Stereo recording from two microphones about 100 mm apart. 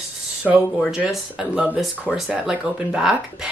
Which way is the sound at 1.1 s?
5° right (ahead or behind).